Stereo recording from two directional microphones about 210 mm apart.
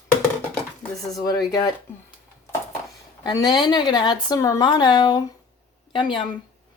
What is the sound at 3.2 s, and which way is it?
Speech, 20° left (ahead or behind).